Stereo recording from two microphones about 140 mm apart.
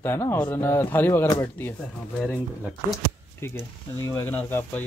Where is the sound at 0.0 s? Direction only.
15° left (ahead or behind).